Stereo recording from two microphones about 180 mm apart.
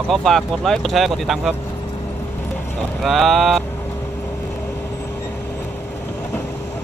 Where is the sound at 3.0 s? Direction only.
Centre (ahead or behind).